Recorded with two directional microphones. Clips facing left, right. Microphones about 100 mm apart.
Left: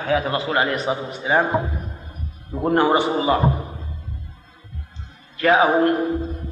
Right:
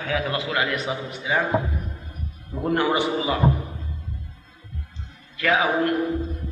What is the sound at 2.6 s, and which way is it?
Speech, 35° left (ahead or behind).